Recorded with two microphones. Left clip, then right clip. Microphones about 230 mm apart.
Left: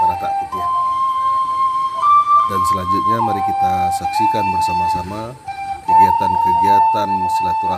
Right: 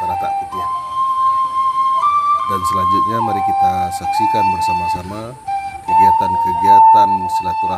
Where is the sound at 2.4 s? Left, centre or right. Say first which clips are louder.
Right 1 dB; centre.